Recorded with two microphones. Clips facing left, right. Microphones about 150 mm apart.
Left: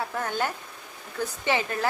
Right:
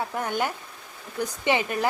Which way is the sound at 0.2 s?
15° right (ahead or behind).